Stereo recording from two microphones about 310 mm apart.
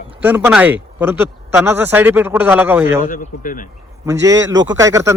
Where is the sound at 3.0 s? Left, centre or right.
Left.